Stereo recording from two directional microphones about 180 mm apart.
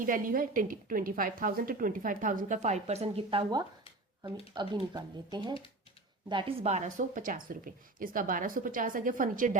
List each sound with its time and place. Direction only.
0.0 s a woman's voice: 50° right (ahead or behind); by 6.7 s 25° right (ahead or behind)
6.7 s a woman's voice: 40° right (ahead or behind)